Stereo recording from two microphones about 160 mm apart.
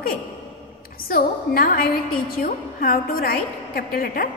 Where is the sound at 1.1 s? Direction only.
65° left (ahead or behind).